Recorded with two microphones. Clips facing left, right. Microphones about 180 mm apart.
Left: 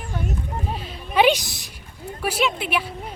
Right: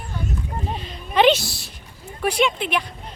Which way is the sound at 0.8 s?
10° left (ahead or behind).